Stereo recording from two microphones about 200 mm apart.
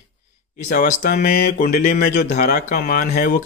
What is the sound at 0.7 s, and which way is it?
Speech, 40° left (ahead or behind).